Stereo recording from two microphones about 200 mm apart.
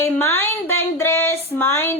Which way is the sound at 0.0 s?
10° left (ahead or behind).